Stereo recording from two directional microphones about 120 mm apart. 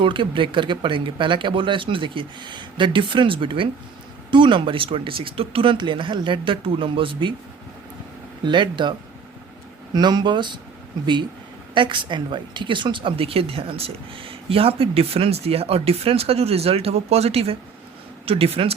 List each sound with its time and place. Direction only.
0.0 s speech: 45° right (ahead or behind)
8.4 s speech: 40° right (ahead or behind)